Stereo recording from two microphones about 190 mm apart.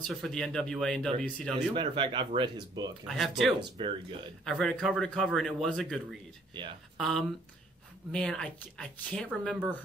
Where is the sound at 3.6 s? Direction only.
30° right (ahead or behind).